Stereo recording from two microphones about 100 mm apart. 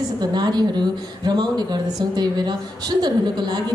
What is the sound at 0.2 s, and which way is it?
A woman's voice, 45° right (ahead or behind).